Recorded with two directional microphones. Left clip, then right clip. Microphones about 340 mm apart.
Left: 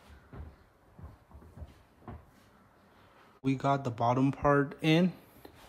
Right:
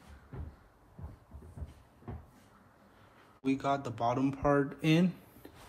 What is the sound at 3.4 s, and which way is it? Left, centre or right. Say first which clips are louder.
Speech: left 2 dB; centre.